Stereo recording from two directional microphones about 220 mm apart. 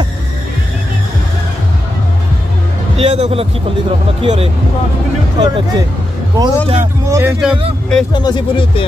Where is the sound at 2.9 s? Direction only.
25° right (ahead or behind).